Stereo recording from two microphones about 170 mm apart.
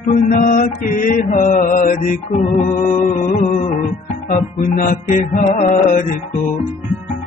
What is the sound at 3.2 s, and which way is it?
Music, 50° left (ahead or behind).